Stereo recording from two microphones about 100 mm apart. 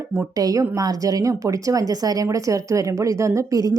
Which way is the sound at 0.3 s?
40° right (ahead or behind).